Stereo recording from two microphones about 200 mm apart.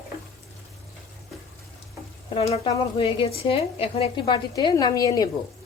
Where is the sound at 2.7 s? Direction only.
25° left (ahead or behind).